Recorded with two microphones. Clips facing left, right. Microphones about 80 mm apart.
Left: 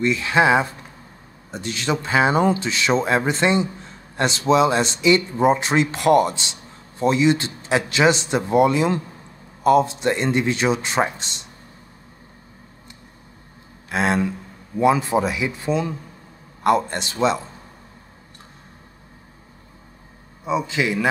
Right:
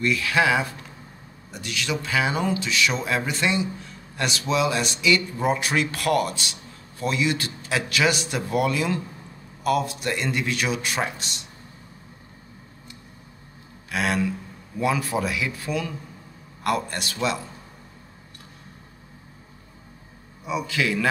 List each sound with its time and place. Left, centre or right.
0.0 s speech: left
13.8 s a sound: left
14.8 s speech: left
20.4 s speech: left